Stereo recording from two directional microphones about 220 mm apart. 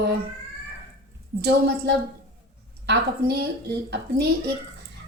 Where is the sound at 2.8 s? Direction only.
50° right (ahead or behind).